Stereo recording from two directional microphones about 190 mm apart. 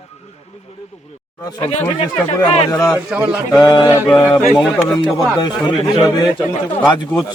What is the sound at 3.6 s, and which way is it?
Speech, 20° left (ahead or behind).